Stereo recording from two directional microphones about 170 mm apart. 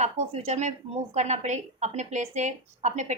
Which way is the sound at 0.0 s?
40° right (ahead or behind).